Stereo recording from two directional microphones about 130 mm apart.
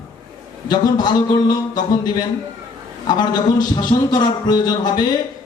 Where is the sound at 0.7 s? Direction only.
35° left (ahead or behind).